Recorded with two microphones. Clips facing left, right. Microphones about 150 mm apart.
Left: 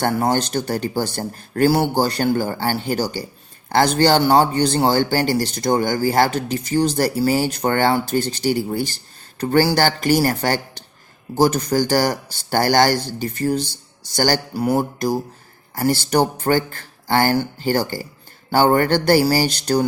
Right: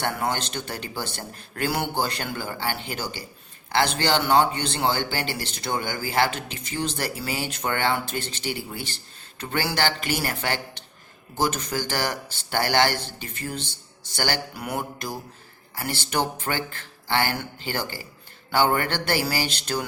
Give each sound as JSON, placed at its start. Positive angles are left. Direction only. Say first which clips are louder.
{"t": 0.0, "sound": "a man's voice", "louder": "left 8 dB", "side_deg": 35}